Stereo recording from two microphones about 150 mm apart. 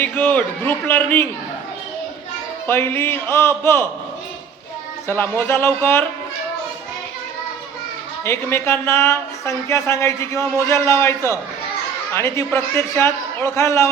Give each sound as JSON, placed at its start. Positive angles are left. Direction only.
{"t": 0.0, "sound": "speech", "side_deg": 10}
{"t": 2.6, "sound": "speech", "side_deg": 15}
{"t": 5.0, "sound": "speech", "side_deg": 15}
{"t": 8.2, "sound": "speech", "side_deg": 15}